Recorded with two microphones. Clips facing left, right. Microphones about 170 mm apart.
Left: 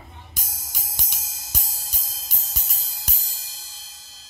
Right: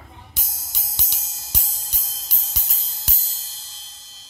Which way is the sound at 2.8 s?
10° left (ahead or behind).